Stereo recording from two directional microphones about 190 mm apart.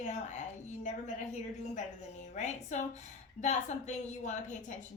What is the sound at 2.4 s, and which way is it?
A woman's voice, 35° left (ahead or behind).